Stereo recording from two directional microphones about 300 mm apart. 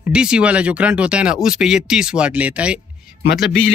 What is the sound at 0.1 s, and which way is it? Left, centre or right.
A man's voice, centre.